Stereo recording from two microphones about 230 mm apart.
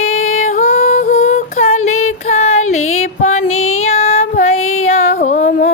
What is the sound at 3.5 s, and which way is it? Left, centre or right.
Child singing, left.